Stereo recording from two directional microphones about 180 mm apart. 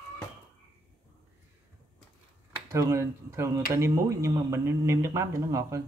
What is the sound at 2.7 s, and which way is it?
Speech, 15° right (ahead or behind).